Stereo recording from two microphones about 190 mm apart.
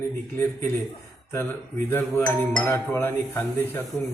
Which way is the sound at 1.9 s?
10° left (ahead or behind).